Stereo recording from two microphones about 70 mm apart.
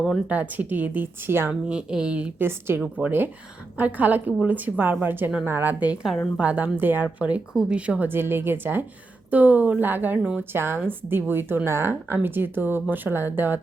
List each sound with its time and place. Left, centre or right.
0.3 s a woman's voice: right
1.6 s speech: centre
2.4 s a woman's voice: right